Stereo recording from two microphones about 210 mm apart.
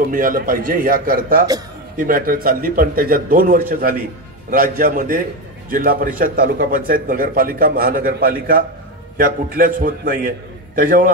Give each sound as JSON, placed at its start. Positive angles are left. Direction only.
{"t": 0.1, "sound": "a man's voice", "side_deg": -40}